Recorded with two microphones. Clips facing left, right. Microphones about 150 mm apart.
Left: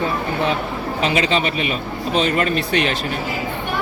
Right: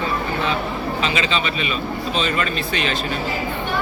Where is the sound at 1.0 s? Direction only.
60° left (ahead or behind).